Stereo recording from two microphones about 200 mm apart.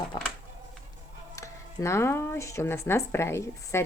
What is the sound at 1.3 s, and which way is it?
Speech, 15° left (ahead or behind).